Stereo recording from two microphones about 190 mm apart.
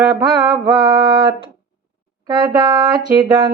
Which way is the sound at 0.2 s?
20° right (ahead or behind).